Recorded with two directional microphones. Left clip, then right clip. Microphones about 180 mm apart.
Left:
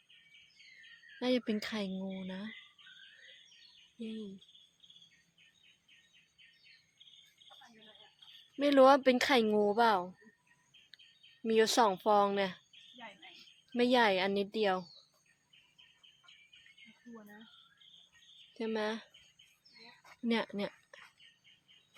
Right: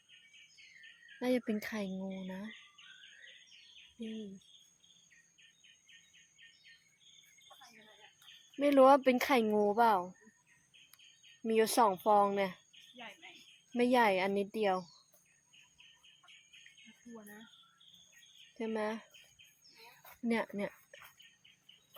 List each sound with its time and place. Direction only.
1.2 s speech: 15° left (ahead or behind)
8.5 s speech: 15° left (ahead or behind)
11.4 s speech: 15° left (ahead or behind)
13.7 s speech: 10° left (ahead or behind)
18.5 s speech: 15° left (ahead or behind)
20.2 s speech: 15° left (ahead or behind)